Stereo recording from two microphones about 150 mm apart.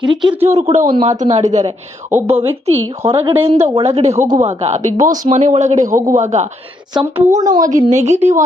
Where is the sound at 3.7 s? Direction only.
45° right (ahead or behind).